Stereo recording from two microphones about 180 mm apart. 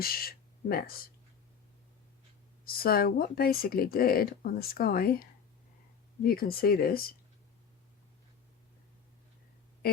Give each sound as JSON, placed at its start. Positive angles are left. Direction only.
{"t": 0.0, "sound": "speech", "side_deg": 55}
{"t": 2.6, "sound": "speech", "side_deg": 55}
{"t": 6.2, "sound": "speech", "side_deg": 55}